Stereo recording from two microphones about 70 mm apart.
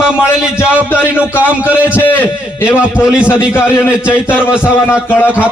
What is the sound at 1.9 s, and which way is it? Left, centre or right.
A man's voice, left.